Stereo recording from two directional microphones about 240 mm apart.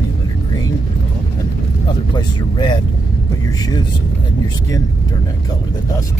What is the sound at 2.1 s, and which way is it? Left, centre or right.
Speech, centre.